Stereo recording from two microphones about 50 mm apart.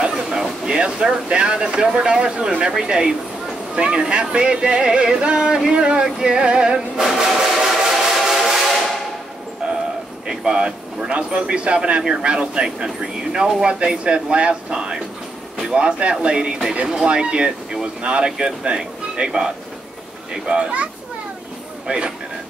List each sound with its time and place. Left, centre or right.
0.0 s a sound: centre
1.3 s speech: centre
7.2 s train: centre
10.2 s speech: centre